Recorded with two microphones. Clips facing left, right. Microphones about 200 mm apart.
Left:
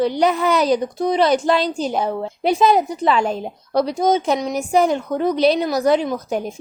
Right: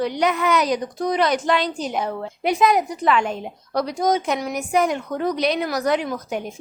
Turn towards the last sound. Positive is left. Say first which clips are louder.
# left 5 dB
turn(degrees=25)  # may be behind; listen again after turning